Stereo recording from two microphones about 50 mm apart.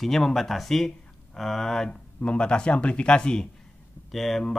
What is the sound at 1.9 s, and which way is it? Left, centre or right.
Speech, left.